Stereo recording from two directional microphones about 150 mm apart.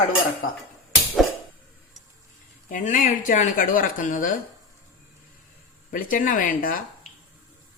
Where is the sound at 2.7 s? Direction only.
60° left (ahead or behind).